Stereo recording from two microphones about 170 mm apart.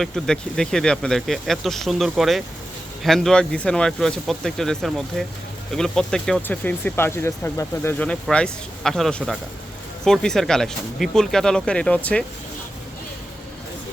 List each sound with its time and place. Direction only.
0.0 s speech: 5° left (ahead or behind)